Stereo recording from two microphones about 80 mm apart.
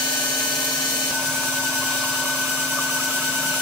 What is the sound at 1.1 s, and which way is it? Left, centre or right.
Vehicle, centre.